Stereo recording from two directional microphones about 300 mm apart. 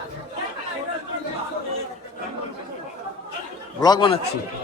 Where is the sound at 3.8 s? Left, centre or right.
Centre.